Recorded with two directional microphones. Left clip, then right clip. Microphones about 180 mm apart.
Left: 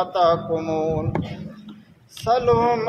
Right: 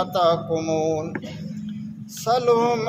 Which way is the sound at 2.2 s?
35° right (ahead or behind).